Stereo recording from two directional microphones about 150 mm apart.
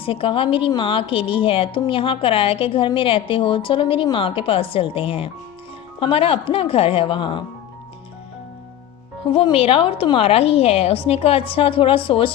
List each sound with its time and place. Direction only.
0.0 s a woman's voice: 35° left (ahead or behind)
9.3 s a woman's voice: 40° left (ahead or behind)